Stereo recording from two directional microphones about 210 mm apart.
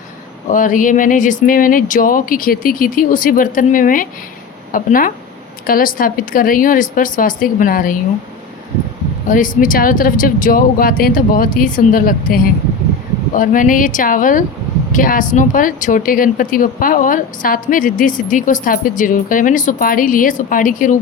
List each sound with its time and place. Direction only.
0.5 s speech: 40° left (ahead or behind)
9.2 s speech: 40° left (ahead or behind)